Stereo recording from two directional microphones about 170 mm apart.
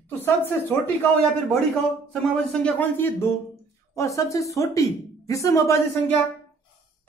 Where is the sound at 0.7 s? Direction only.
15° left (ahead or behind).